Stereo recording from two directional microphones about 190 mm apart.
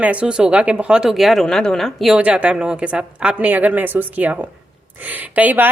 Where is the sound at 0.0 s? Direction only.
5° right (ahead or behind).